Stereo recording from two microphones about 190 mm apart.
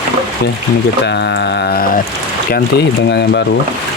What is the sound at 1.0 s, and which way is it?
Speech, 65° left (ahead or behind).